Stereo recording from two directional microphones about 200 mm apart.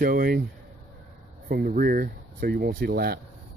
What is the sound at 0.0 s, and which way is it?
Speech, 45° right (ahead or behind).